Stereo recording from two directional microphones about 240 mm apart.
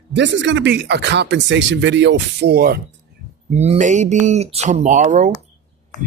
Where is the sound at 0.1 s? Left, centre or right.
Right.